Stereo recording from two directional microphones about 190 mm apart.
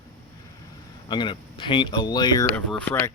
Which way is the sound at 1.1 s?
25° left (ahead or behind).